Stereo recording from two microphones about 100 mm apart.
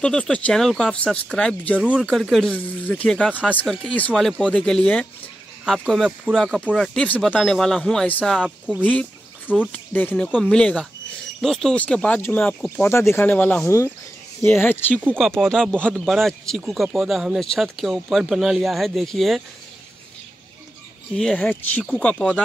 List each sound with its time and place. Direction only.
0.0 s speech: 10° left (ahead or behind)
1.8 s speech: 10° right (ahead or behind)
2.0 s a man's voice: centre (ahead or behind)
3.6 s a man's voice: 5° left (ahead or behind)
13.7 s speech: 30° left (ahead or behind)
15.1 s a man's voice: 5° left (ahead or behind)
21.1 s speech: 5° left (ahead or behind)